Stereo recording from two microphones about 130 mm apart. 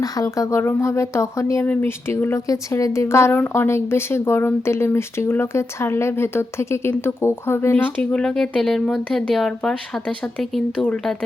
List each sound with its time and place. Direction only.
0.0 s a woman's voice: 25° left (ahead or behind)
8.1 s speech: 5° left (ahead or behind)